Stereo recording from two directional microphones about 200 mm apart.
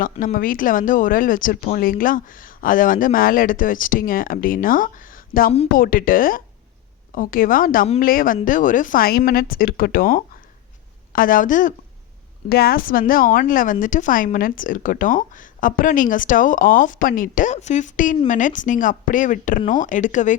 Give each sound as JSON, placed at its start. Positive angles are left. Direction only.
{"t": 0.0, "sound": "a woman's voice", "side_deg": 45}